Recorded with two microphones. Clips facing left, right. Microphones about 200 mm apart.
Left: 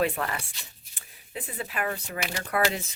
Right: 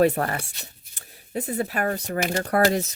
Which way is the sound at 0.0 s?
45° right (ahead or behind).